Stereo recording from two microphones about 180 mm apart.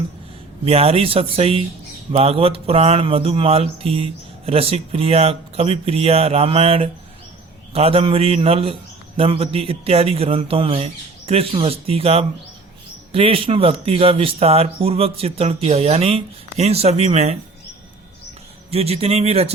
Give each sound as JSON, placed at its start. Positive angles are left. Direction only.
{"t": 0.6, "sound": "speech", "side_deg": -35}
{"t": 18.7, "sound": "speech", "side_deg": -35}